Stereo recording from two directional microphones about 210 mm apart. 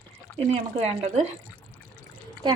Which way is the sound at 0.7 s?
30° right (ahead or behind).